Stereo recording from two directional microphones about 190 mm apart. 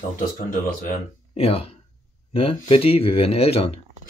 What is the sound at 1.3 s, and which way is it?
Speech, 30° left (ahead or behind).